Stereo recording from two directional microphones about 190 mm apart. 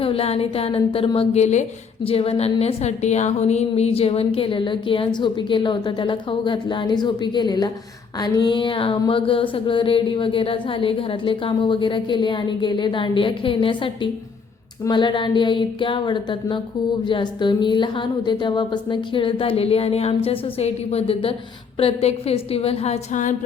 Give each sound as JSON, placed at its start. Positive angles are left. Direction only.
{"t": 0.0, "sound": "a woman's voice", "side_deg": 30}
{"t": 2.0, "sound": "a sound", "side_deg": 30}
{"t": 21.8, "sound": "a woman's voice", "side_deg": 30}